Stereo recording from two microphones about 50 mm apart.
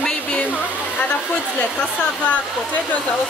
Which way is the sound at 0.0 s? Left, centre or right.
Left.